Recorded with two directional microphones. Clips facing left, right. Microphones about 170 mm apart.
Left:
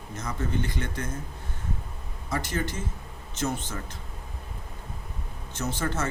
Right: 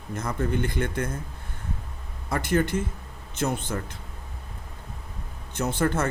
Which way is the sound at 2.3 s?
55° right (ahead or behind).